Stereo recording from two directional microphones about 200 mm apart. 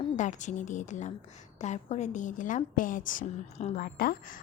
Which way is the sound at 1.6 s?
35° left (ahead or behind).